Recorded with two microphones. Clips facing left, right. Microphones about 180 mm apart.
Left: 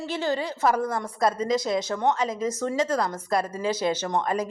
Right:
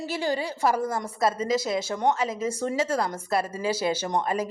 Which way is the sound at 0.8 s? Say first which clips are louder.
Left 1 dB; 25° right (ahead or behind).